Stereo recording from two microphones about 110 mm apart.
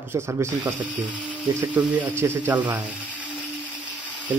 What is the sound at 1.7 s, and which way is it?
Speech, 15° right (ahead or behind).